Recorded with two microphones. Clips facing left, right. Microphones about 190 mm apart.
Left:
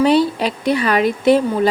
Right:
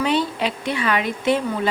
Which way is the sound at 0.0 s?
35° left (ahead or behind).